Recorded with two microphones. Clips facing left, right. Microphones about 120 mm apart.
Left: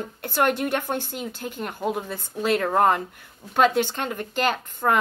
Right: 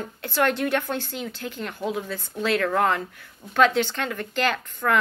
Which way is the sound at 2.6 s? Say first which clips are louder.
Left 3 dB; 35° left (ahead or behind).